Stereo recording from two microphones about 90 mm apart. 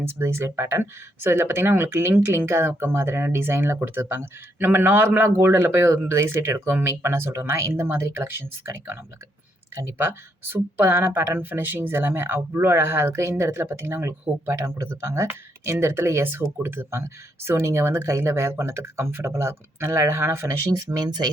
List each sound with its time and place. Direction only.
0.0 s speech: 30° right (ahead or behind)
20.7 s speech: 50° right (ahead or behind)